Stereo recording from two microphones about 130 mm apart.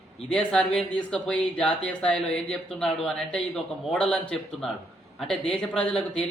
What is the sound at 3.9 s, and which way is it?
A man's voice, 10° left (ahead or behind).